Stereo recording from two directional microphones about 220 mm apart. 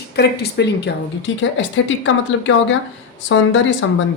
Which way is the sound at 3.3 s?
60° left (ahead or behind).